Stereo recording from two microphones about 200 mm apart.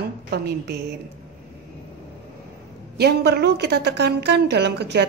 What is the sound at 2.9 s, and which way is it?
A woman's voice, 55° right (ahead or behind).